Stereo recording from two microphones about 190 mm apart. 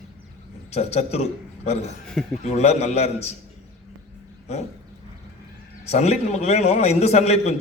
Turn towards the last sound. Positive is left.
turn(degrees=35)  # may be behind; listen again after turning